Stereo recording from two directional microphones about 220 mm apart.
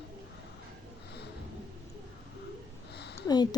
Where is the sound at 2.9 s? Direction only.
50° left (ahead or behind).